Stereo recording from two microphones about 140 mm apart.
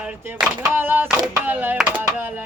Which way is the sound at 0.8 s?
15° right (ahead or behind).